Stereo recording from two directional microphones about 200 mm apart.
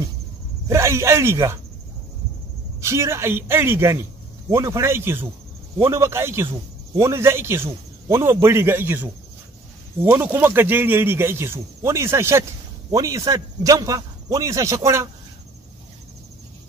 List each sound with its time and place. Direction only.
0.7 s speech: 15° right (ahead or behind)
2.8 s speech: 15° right (ahead or behind)